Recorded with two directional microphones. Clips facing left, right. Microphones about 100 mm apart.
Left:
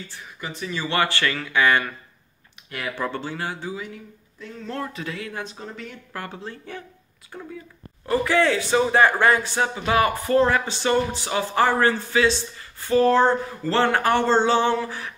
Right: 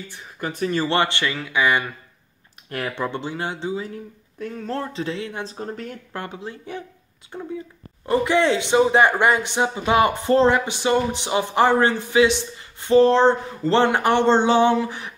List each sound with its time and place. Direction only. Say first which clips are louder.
0.4 s speech: right 7 dB; 50° right (ahead or behind)
0.8 s speech: right 2 dB; 25° right (ahead or behind)
3.0 s speech: even; 20° right (ahead or behind); by 5.9 s 45° right (ahead or behind)
6.1 s speech: right 1 dB; 20° right (ahead or behind)